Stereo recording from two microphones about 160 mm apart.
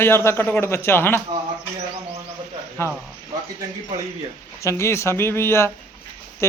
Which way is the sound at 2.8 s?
15° left (ahead or behind).